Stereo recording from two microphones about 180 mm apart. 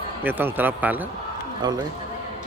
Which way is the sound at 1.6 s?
25° right (ahead or behind).